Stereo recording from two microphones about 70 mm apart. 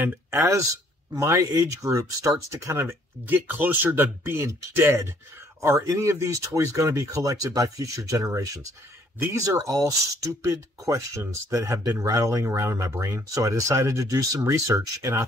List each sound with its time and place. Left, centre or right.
0.0 s speech: right
1.1 s speech: right
3.3 s speech: right